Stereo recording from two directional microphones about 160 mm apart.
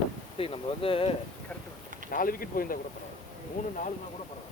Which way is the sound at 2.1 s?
60° left (ahead or behind).